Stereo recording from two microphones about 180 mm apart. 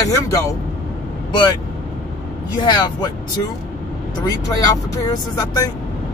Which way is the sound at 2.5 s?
25° left (ahead or behind).